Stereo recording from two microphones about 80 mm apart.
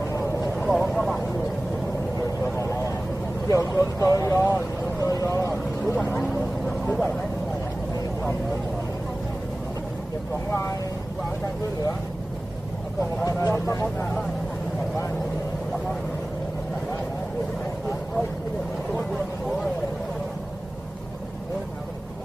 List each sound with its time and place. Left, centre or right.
0.6 s vehicle: centre
3.5 s vehicle: left
5.9 s a sound: left
6.2 s vehicle: centre
10.5 s vehicle: left
13.2 s vehicle: left